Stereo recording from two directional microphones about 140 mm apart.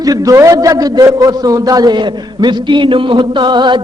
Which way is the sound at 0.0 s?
25° right (ahead or behind).